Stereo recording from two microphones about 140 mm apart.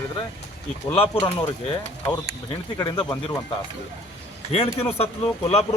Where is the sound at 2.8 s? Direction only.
30° left (ahead or behind).